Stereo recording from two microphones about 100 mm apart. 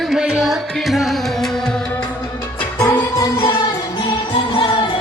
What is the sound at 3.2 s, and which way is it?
Music, 40° left (ahead or behind).